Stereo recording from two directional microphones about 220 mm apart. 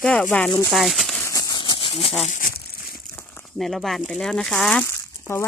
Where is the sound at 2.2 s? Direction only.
40° left (ahead or behind).